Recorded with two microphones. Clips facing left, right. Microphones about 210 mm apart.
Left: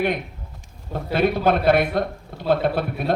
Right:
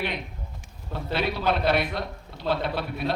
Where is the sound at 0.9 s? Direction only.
50° left (ahead or behind).